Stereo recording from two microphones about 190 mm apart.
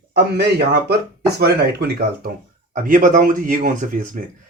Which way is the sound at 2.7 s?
45° right (ahead or behind).